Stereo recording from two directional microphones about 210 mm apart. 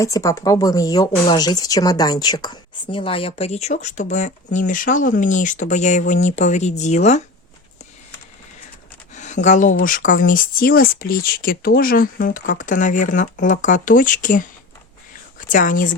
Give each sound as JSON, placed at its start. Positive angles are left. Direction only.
{"t": 0.0, "sound": "speech", "side_deg": 15}
{"t": 9.1, "sound": "speech", "side_deg": 35}
{"t": 15.4, "sound": "speech", "side_deg": 40}